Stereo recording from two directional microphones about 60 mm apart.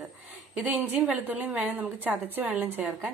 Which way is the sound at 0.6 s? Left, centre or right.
Right.